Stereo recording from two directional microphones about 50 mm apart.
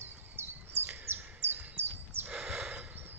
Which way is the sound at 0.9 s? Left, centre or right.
Right.